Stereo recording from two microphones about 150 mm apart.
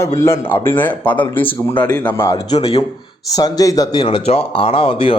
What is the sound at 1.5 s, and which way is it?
Speech, 30° left (ahead or behind).